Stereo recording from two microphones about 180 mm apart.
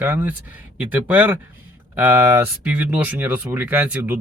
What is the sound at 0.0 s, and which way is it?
Speech, 10° right (ahead or behind).